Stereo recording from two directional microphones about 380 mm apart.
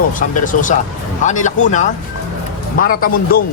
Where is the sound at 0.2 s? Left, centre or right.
Left.